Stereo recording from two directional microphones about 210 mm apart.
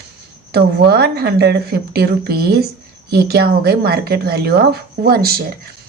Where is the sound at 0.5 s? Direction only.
50° right (ahead or behind).